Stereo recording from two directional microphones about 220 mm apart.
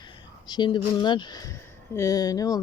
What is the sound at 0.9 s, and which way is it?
Speech, 20° left (ahead or behind).